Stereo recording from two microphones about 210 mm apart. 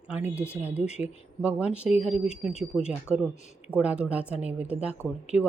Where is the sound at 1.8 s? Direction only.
30° left (ahead or behind).